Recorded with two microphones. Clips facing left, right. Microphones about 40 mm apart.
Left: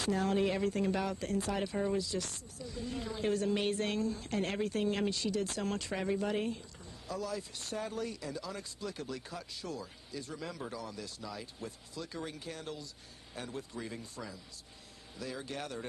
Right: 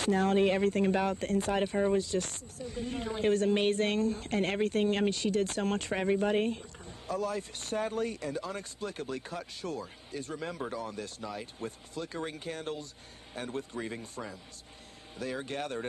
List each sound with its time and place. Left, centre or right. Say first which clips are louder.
0.0 s speech: right 5 dB; right